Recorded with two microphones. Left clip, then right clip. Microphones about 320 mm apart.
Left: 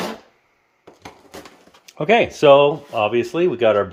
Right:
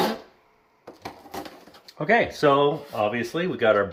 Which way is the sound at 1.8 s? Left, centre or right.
Left.